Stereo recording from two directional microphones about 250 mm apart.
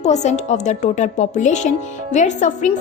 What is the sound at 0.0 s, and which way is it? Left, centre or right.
A woman's voice, left.